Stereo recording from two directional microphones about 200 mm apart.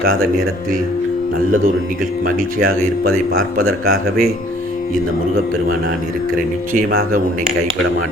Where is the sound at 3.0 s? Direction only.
90° right.